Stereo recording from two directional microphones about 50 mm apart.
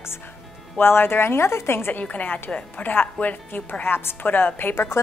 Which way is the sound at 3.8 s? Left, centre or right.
Left.